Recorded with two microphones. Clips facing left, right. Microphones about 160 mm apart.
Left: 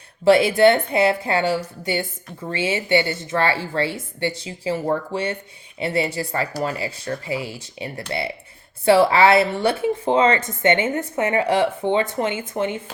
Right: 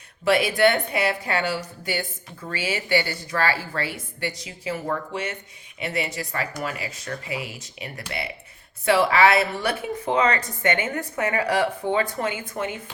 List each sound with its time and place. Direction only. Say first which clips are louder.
0.3 s a woman's voice: left 5 dB; 25° left (ahead or behind)